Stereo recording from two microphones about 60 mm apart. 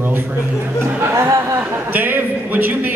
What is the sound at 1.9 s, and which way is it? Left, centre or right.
A man's voice, right.